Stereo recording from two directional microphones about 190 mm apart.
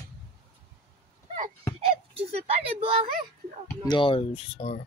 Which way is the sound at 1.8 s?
30° right (ahead or behind).